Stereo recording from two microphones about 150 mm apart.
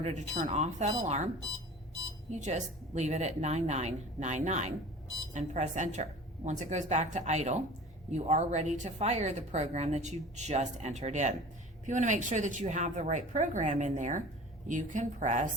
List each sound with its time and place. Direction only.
0.0 s speech: 55° right (ahead or behind)
2.3 s a woman's voice: 50° right (ahead or behind)